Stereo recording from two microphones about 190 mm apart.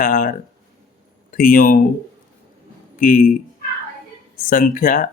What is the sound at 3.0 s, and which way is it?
Speech, 45° left (ahead or behind).